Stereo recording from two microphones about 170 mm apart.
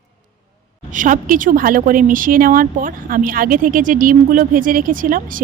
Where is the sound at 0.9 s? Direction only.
50° right (ahead or behind).